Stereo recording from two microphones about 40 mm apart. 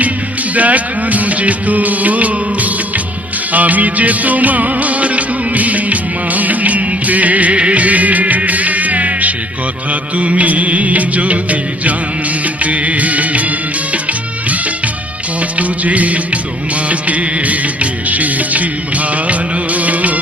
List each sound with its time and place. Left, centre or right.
0.5 s music: right
9.9 s music of bollywood: right
12.6 s music: right
13.9 s music of bollywood: right